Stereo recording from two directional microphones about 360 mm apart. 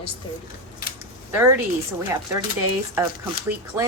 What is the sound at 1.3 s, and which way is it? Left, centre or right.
Speech, centre.